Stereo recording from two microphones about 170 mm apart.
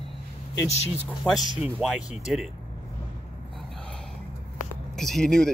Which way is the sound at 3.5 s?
5° left (ahead or behind).